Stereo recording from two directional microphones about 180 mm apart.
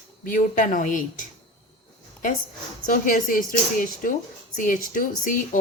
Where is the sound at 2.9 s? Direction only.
50° left (ahead or behind).